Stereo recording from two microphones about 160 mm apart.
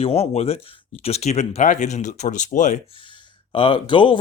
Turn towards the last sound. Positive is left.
turn(degrees=30)  # may be behind; listen again after turning